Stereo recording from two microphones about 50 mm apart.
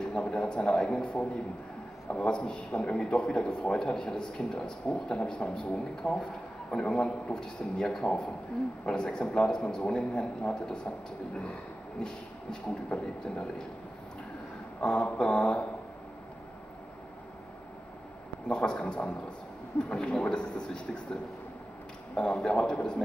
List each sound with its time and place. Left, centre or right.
0.0 s a man's voice: left
12.0 s a man's voice: centre
14.8 s a man's voice: left
18.5 s a man's voice: centre